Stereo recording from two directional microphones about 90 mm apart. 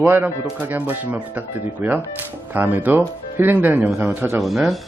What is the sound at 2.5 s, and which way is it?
Speech, 20° right (ahead or behind).